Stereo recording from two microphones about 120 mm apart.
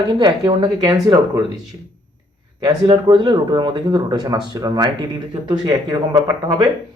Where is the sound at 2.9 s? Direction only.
40° right (ahead or behind).